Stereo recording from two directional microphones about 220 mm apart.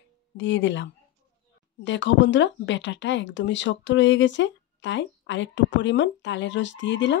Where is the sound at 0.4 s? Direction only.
55° left (ahead or behind).